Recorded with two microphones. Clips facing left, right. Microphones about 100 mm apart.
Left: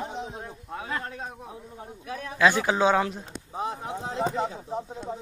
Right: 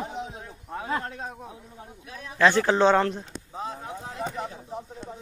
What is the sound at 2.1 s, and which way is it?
Speech, 55° left (ahead or behind).